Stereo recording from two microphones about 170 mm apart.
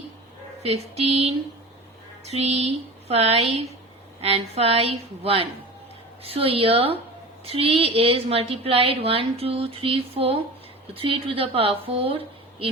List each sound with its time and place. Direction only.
0.6 s a woman's voice: 40° right (ahead or behind)